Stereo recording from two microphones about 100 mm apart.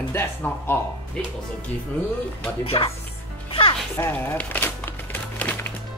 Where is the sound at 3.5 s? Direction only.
65° left (ahead or behind).